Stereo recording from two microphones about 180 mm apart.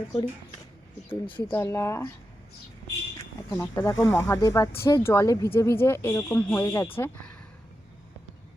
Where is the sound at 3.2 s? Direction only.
15° left (ahead or behind).